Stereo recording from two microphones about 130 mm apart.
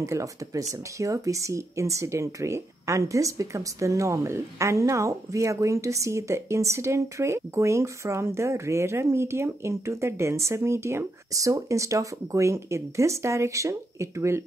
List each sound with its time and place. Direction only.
0.0 s speech: 25° right (ahead or behind)